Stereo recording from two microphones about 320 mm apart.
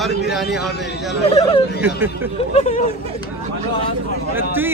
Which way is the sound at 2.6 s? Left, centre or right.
Left.